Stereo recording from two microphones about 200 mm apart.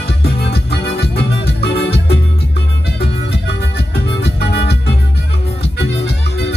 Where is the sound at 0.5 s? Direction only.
55° left (ahead or behind).